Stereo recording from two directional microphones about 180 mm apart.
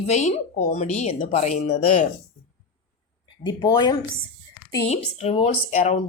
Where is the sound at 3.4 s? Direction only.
25° left (ahead or behind).